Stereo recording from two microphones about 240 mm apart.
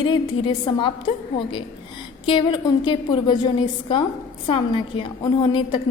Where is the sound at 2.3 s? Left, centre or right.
Left.